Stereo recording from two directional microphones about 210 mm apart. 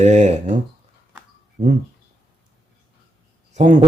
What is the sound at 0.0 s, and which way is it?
Speech, 35° right (ahead or behind).